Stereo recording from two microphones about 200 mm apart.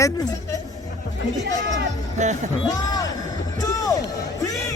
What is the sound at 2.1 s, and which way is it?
Speech, 35° right (ahead or behind).